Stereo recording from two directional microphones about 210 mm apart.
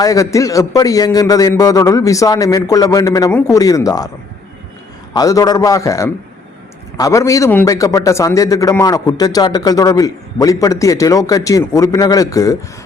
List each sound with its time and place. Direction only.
0.0 s a man's voice: 15° left (ahead or behind)
5.1 s a man's voice: 15° left (ahead or behind)